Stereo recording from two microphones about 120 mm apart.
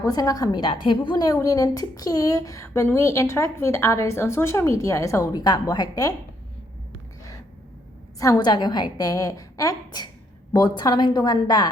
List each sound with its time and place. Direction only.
0.0 s a woman's voice: 30° left (ahead or behind)
8.2 s a woman's voice: 35° left (ahead or behind)